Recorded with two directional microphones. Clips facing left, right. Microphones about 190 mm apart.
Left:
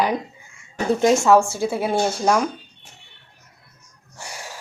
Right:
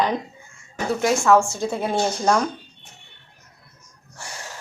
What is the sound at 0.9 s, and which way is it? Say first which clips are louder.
Speech: left 4 dB; 25° left (ahead or behind).